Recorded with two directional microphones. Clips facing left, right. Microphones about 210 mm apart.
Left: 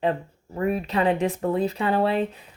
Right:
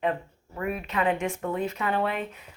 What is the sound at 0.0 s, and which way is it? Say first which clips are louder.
Speech: left 3 dB; 30° left (ahead or behind).